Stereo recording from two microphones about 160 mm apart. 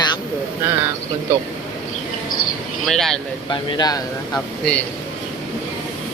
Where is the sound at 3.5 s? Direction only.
25° left (ahead or behind).